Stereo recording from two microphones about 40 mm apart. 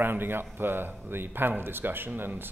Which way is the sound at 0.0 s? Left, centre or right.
Right.